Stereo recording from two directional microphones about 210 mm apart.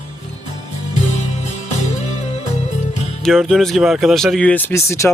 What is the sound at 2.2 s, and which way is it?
Music, 35° left (ahead or behind).